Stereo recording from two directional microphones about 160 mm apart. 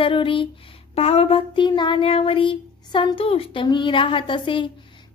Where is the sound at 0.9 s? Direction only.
40° left (ahead or behind).